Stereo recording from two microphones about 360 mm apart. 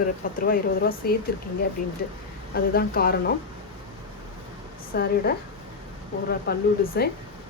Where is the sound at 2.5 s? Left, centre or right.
Left.